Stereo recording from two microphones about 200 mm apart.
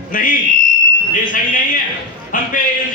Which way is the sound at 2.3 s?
40° left (ahead or behind).